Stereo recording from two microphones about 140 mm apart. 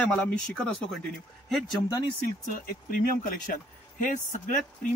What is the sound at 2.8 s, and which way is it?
Speech, 85° left.